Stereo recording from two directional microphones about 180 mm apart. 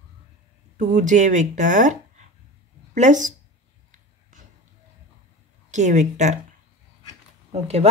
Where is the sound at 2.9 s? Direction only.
40° right (ahead or behind).